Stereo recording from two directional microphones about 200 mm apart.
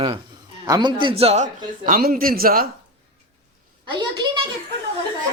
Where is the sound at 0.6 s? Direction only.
20° right (ahead or behind); by 2.6 s 45° right (ahead or behind).